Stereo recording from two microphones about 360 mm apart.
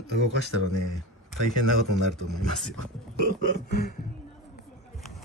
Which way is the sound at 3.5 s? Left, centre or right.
Left.